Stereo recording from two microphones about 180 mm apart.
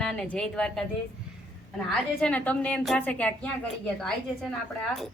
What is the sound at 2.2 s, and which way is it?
A woman's voice, 5° left (ahead or behind).